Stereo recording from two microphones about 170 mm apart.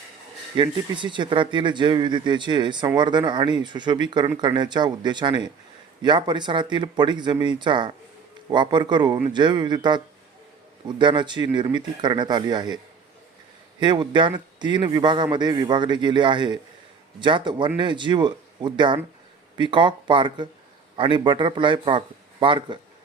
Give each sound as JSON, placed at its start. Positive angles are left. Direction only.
{"t": 0.5, "sound": "speech", "side_deg": -30}